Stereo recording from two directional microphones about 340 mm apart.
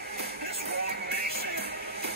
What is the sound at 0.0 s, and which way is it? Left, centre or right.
Music, right.